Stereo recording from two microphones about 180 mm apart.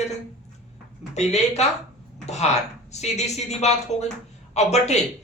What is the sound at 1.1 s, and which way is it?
A man's voice, 40° left (ahead or behind).